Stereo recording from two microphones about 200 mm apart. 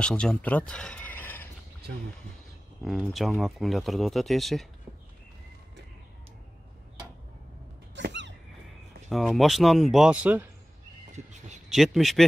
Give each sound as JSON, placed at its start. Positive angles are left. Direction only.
{"t": 0.0, "sound": "speech", "side_deg": 5}
{"t": 2.8, "sound": "speech", "side_deg": 0}
{"t": 7.9, "sound": "a sound", "side_deg": -60}
{"t": 9.1, "sound": "speech", "side_deg": 0}
{"t": 11.1, "sound": "a sound", "side_deg": -35}
{"t": 11.7, "sound": "speech", "side_deg": 0}